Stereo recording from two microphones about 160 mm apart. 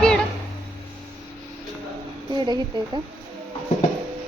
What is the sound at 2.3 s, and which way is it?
Speech, 30° right (ahead or behind).